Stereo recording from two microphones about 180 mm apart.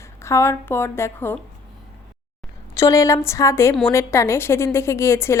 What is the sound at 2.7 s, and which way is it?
A woman's voice, 15° left (ahead or behind).